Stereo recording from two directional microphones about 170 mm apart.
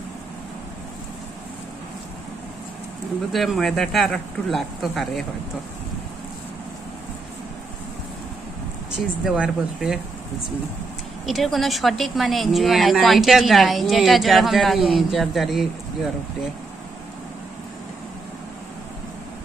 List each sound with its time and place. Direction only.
3.3 s a woman's voice: centre (ahead or behind)
8.9 s a woman's voice: 5° right (ahead or behind)
11.2 s a woman's voice: centre (ahead or behind)